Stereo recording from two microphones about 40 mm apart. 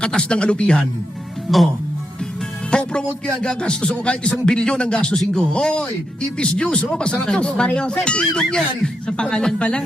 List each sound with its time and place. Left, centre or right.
0.0 s speech: left
1.5 s speech: centre
2.6 s speech: left
5.1 s speech: centre
5.5 s speech: left